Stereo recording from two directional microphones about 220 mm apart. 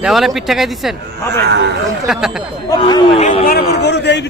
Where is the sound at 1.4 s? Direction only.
50° right (ahead or behind).